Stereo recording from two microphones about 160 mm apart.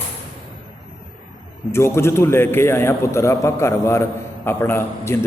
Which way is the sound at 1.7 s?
15° left (ahead or behind).